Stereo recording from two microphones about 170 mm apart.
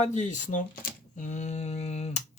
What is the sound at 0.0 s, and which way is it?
Speech, 45° left (ahead or behind).